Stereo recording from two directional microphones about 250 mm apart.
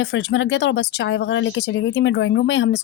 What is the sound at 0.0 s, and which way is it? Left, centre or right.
Speech, left.